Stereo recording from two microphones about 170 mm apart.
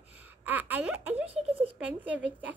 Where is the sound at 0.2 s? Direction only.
10° right (ahead or behind).